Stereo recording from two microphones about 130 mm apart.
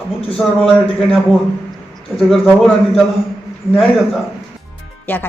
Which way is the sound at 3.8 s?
Centre (ahead or behind).